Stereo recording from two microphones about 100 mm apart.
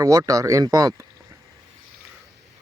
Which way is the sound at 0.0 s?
35° right (ahead or behind).